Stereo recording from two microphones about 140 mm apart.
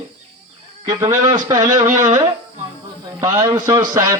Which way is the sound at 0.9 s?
25° right (ahead or behind).